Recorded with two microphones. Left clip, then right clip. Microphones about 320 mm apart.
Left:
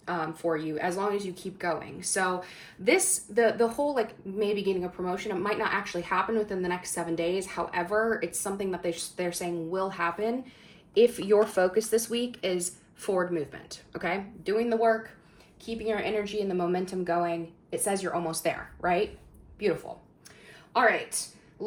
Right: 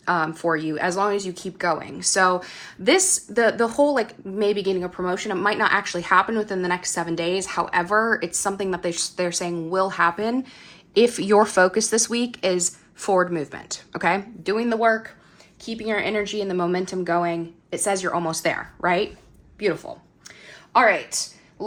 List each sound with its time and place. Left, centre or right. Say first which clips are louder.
0.0 s speech: right 9 dB; right